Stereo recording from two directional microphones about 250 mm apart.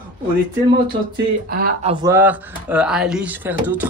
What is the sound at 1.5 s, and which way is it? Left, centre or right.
Speech, right.